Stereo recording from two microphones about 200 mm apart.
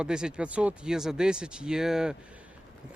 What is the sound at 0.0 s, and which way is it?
Speech, 5° right (ahead or behind).